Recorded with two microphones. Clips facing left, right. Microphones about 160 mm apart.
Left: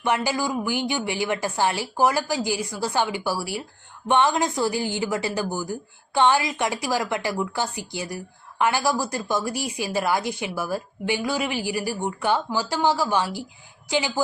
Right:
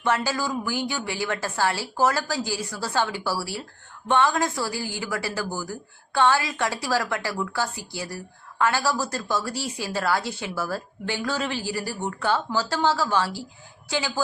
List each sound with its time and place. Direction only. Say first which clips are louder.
0.0 s a woman's voice: left 1 dB; 15° left (ahead or behind)